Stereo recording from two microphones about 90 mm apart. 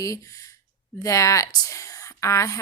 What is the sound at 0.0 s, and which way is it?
A woman's voice, 35° left (ahead or behind).